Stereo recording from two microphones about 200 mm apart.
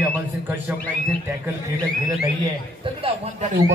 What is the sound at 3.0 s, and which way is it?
Speech, 30° right (ahead or behind).